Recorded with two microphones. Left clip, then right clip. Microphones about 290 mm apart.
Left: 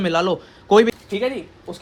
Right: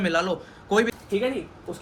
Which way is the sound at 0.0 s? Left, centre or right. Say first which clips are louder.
Left 4 dB; centre.